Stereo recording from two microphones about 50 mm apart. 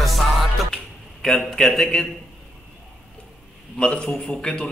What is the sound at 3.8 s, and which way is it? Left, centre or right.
Speech, centre.